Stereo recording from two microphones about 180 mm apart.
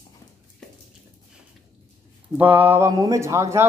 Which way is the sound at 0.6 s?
5° left (ahead or behind).